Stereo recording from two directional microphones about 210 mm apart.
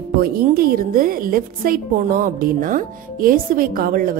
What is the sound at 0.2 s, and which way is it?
A woman's voice, 45° right (ahead or behind).